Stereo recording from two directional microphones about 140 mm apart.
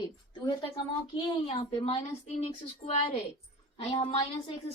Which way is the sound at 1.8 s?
50° left (ahead or behind).